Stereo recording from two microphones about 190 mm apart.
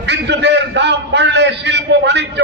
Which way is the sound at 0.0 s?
65° right (ahead or behind).